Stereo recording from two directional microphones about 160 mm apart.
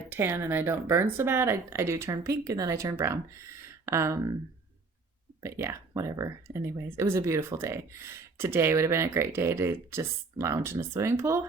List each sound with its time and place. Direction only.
0.1 s speech: 15° right (ahead or behind)
5.4 s speech: 15° right (ahead or behind)